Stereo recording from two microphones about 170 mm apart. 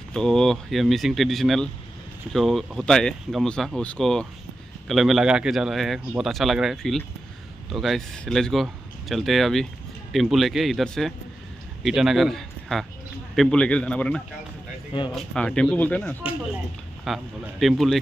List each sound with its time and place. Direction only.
0.1 s a man's voice: 5° left (ahead or behind)